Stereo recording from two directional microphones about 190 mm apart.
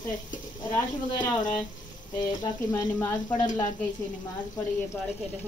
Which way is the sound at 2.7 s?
15° left (ahead or behind).